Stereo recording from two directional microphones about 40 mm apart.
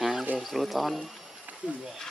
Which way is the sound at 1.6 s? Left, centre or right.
Right.